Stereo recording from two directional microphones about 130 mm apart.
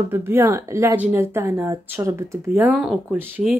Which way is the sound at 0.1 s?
20° right (ahead or behind).